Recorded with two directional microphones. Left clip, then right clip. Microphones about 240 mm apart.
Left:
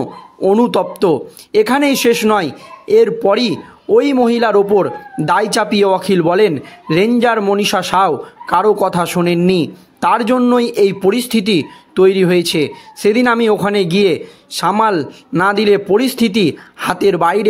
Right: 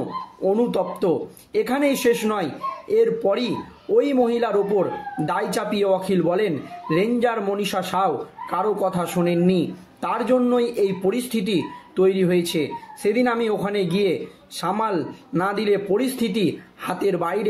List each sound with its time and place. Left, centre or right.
0.4 s speech: left